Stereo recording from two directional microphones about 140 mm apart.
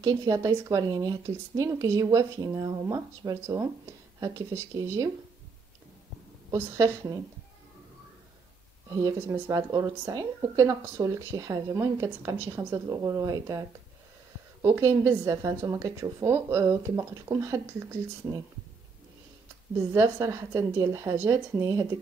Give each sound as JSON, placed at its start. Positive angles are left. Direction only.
{"t": 0.0, "sound": "speech", "side_deg": -25}
{"t": 6.5, "sound": "speech", "side_deg": -20}
{"t": 9.5, "sound": "speech", "side_deg": -25}
{"t": 19.9, "sound": "speech", "side_deg": -20}